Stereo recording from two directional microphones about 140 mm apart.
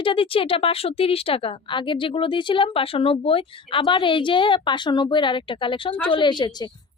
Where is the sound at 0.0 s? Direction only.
40° left (ahead or behind).